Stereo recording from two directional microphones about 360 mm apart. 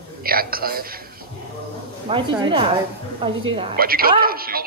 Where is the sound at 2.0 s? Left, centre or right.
Centre.